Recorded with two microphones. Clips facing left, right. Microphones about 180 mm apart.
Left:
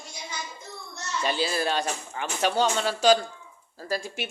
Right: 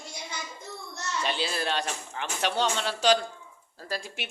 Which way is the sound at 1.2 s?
5° left (ahead or behind).